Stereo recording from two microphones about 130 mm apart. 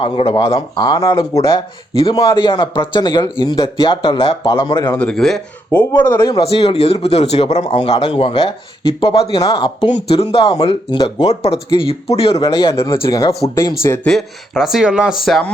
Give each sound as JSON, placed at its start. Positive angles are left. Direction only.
{"t": 0.0, "sound": "speech", "side_deg": 40}
{"t": 4.9, "sound": "speech", "side_deg": 5}
{"t": 5.7, "sound": "speech", "side_deg": 15}
{"t": 6.3, "sound": "speech", "side_deg": 50}
{"t": 10.5, "sound": "speech", "side_deg": 35}
{"t": 11.3, "sound": "speech", "side_deg": 50}
{"t": 12.4, "sound": "speech", "side_deg": 25}
{"t": 14.0, "sound": "speech", "side_deg": 0}